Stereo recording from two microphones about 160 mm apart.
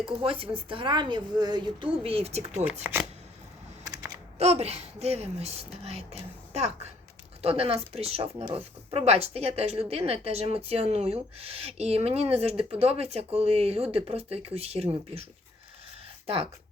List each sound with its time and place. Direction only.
0.2 s speech: 35° right (ahead or behind)
2.8 s speech: 10° right (ahead or behind)
4.4 s speech: 40° right (ahead or behind)